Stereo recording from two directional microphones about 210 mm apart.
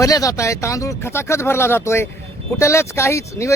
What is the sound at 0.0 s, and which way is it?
A man's voice, 15° left (ahead or behind).